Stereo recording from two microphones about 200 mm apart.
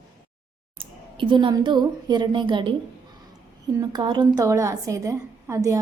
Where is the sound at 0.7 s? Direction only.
25° right (ahead or behind).